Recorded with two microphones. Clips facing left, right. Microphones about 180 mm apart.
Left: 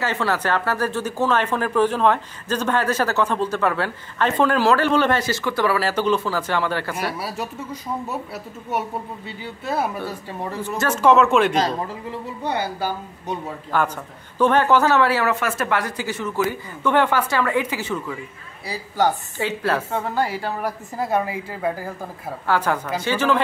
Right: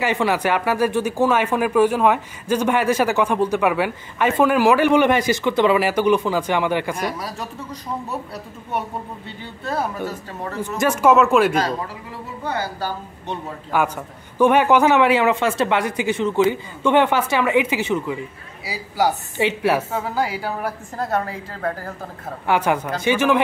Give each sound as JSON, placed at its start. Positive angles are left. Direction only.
{"t": 0.0, "sound": "speech", "side_deg": -15}
{"t": 7.2, "sound": "speech", "side_deg": 5}
{"t": 10.0, "sound": "speech", "side_deg": 10}
{"t": 10.8, "sound": "a woman's voice", "side_deg": -10}
{"t": 12.4, "sound": "speech", "side_deg": 15}
{"t": 13.7, "sound": "speech", "side_deg": -10}
{"t": 18.7, "sound": "a woman's voice", "side_deg": -5}
{"t": 21.0, "sound": "speech", "side_deg": 15}
{"t": 22.5, "sound": "speech", "side_deg": -20}